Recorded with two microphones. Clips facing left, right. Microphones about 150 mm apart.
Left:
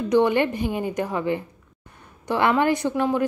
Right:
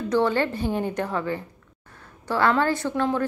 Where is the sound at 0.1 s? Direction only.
15° left (ahead or behind).